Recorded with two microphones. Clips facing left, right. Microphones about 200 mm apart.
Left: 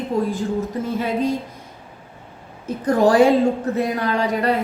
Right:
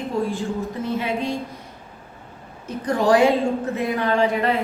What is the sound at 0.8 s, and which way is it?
Speech, 40° left (ahead or behind).